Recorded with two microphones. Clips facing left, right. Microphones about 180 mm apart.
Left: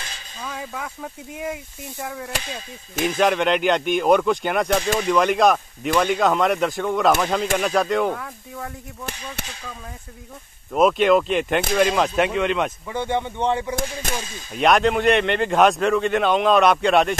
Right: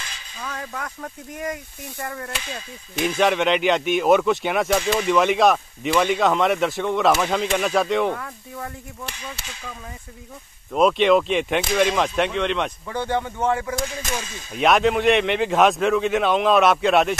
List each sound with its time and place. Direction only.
0.4 s speech: 5° left (ahead or behind)
10.7 s speech: 5° left (ahead or behind)
13.0 s speech: 20° left (ahead or behind)
14.1 s speech: centre (ahead or behind)